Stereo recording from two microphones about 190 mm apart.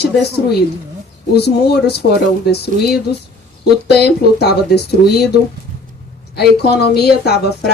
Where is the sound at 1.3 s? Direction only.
60° left (ahead or behind).